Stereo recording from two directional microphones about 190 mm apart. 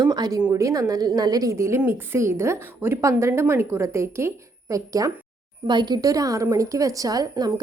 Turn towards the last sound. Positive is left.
turn(degrees=-20)  # may be behind; listen again after turning